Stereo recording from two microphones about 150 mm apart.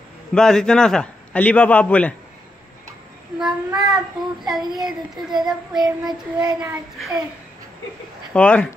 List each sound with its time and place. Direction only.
0.3 s a man's voice: 5° left (ahead or behind)
3.3 s a child's voice: 5° right (ahead or behind)
6.0 s child singing: 30° right (ahead or behind)
6.6 s a child's voice: 5° right (ahead or behind)
8.3 s a man's voice: 5° left (ahead or behind)